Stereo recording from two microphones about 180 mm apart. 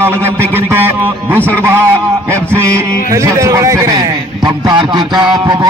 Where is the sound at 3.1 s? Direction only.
15° right (ahead or behind).